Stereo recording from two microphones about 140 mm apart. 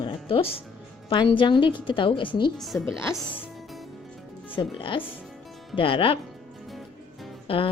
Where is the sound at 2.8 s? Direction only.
15° left (ahead or behind).